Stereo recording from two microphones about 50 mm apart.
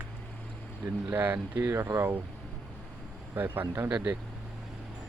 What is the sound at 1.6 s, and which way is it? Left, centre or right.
Speech, right.